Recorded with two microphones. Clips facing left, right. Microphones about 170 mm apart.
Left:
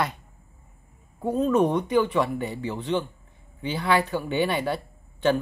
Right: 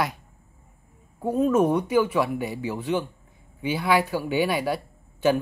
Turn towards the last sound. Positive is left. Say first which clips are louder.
# right 1 dB
turn(degrees=-5)  # may be behind; listen again after turning